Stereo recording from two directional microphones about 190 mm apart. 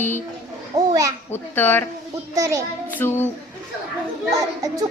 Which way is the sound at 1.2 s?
10° left (ahead or behind).